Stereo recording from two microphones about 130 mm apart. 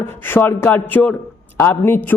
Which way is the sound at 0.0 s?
15° left (ahead or behind).